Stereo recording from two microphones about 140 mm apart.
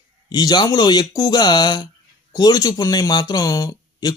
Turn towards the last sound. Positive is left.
turn(degrees=25)  # may be behind; listen again after turning